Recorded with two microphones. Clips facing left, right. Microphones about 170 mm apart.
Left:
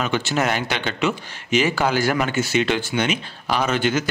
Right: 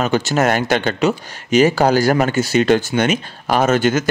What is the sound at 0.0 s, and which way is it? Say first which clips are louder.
Speech: right 5 dB; 40° right (ahead or behind).